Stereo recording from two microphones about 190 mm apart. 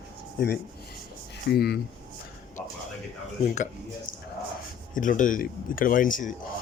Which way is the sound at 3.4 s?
40° left (ahead or behind).